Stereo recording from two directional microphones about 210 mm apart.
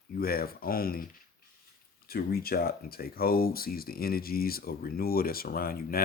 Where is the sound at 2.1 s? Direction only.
45° left (ahead or behind).